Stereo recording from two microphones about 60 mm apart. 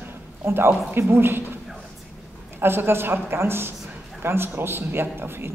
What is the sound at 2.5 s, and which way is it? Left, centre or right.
A woman's voice, right.